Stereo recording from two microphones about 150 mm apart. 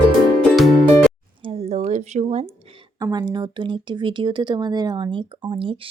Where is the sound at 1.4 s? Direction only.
40° right (ahead or behind).